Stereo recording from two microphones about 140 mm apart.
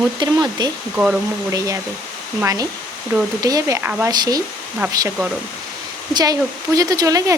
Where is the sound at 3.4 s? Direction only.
25° right (ahead or behind).